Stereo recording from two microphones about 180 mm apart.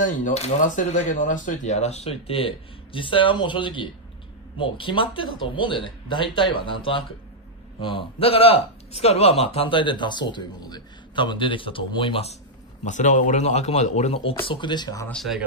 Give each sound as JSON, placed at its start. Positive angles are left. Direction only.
{"t": 0.0, "sound": "speech", "side_deg": 40}
{"t": 15.0, "sound": "speech", "side_deg": 0}